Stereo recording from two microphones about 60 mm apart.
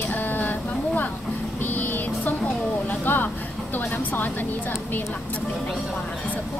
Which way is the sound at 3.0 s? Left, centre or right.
Left.